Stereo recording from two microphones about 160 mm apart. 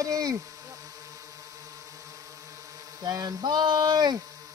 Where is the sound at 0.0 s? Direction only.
20° right (ahead or behind).